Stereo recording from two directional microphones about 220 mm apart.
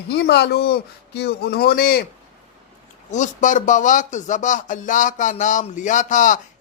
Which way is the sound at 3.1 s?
35° left (ahead or behind).